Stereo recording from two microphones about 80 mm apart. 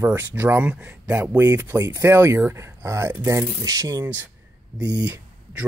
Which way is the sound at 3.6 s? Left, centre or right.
Right.